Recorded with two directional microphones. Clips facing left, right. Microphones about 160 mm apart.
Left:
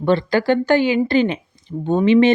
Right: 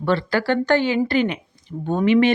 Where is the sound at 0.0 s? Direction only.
20° left (ahead or behind).